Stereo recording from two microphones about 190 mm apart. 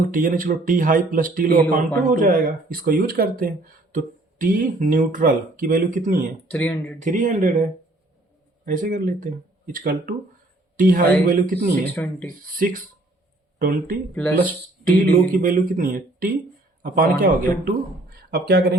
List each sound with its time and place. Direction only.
0.1 s speech: 45° right (ahead or behind)
6.5 s speech: 10° left (ahead or behind)
7.0 s speech: 40° right (ahead or behind)
8.6 s speech: 45° right (ahead or behind)
12.0 s speech: 10° left (ahead or behind)
12.5 s speech: 45° right (ahead or behind)